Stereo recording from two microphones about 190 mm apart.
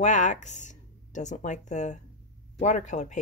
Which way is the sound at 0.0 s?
40° left (ahead or behind).